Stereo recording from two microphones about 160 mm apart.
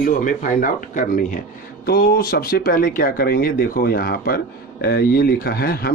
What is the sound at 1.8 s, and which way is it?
Speech, 75° left (ahead or behind).